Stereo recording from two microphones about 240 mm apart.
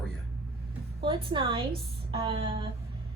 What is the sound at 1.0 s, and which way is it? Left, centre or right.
A woman's voice, right.